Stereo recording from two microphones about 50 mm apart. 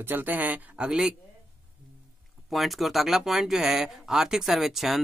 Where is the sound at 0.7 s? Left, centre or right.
Centre.